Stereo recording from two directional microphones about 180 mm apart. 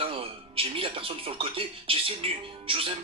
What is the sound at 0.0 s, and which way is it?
Speech, 30° right (ahead or behind).